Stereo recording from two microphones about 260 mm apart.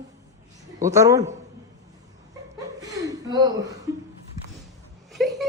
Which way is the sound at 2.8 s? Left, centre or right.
Centre.